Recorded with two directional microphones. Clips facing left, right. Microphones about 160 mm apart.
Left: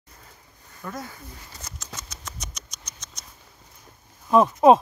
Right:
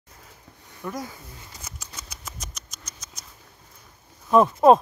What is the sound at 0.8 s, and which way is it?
Speech, 10° right (ahead or behind).